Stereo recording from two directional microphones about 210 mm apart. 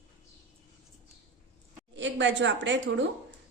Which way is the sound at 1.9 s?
60° right (ahead or behind).